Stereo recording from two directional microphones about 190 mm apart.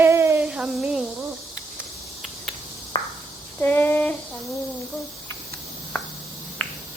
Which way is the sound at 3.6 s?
10° left (ahead or behind).